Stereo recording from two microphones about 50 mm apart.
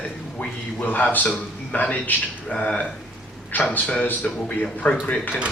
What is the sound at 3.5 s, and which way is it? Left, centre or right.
A man's voice, left.